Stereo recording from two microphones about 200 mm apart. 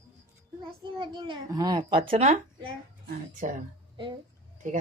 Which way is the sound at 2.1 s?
30° right (ahead or behind).